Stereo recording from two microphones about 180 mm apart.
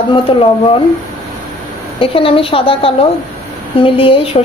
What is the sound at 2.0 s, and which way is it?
A woman's voice, 30° left (ahead or behind).